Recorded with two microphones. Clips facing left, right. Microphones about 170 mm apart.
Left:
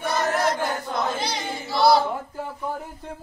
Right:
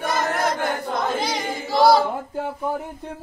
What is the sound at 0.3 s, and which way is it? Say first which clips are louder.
Battle cry: even; 55° right (ahead or behind).